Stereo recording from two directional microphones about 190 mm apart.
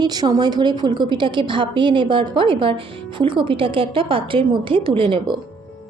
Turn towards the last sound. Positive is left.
turn(degrees=-25)  # may be behind; listen again after turning